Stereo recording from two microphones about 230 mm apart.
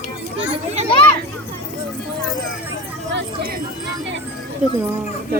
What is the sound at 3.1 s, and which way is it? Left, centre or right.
Speech, right.